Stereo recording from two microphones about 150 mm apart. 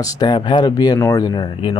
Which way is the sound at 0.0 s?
30° left (ahead or behind).